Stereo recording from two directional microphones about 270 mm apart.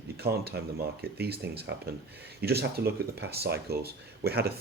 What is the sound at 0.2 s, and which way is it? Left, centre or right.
Speech, right.